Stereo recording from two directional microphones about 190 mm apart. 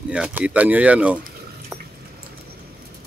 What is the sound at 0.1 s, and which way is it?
Speech, 5° right (ahead or behind).